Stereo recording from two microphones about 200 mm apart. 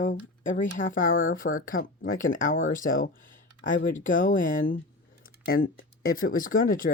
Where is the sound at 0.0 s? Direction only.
40° left (ahead or behind).